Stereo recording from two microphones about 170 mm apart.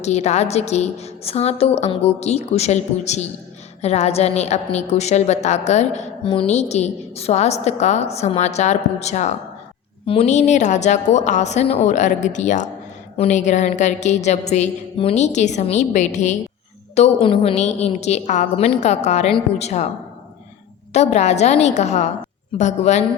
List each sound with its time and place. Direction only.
0.0 s a woman's voice: 40° left (ahead or behind)
20.9 s a woman's voice: 40° left (ahead or behind)